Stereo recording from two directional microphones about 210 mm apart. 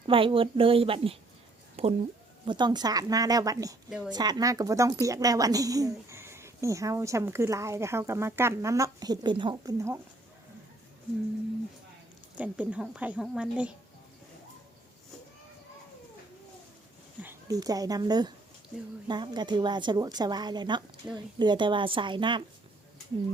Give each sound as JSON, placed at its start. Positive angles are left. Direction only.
{"t": 0.1, "sound": "a woman's voice", "side_deg": -25}
{"t": 1.7, "sound": "a sound", "side_deg": -30}
{"t": 2.4, "sound": "speech", "side_deg": -20}
{"t": 3.8, "sound": "a woman's voice", "side_deg": -5}
{"t": 4.1, "sound": "speech", "side_deg": -20}
{"t": 12.4, "sound": "a woman's voice", "side_deg": -5}
{"t": 17.2, "sound": "a woman's voice", "side_deg": -15}